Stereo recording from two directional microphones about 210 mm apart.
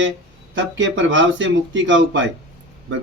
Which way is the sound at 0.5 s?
60° right (ahead or behind).